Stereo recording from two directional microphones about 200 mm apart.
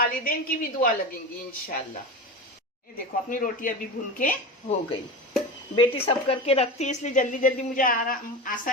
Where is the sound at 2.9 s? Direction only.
45° left (ahead or behind).